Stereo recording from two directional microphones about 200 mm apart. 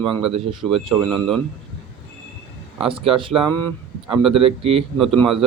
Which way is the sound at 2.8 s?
25° right (ahead or behind).